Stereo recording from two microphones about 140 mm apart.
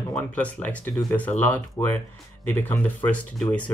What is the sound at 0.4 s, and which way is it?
Speech, 10° left (ahead or behind).